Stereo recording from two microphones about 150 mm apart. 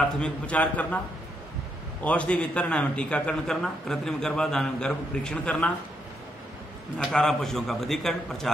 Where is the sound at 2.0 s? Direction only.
10° left (ahead or behind).